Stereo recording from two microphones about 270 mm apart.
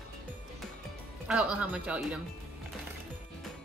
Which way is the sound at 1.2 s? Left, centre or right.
Centre.